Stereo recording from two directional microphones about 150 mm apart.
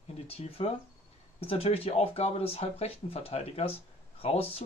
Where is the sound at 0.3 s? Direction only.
45° left (ahead or behind).